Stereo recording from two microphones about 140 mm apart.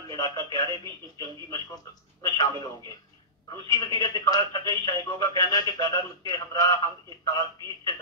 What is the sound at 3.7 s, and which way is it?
Speech, 25° left (ahead or behind).